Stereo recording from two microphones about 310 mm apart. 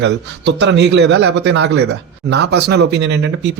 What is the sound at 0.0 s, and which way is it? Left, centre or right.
Speech, right.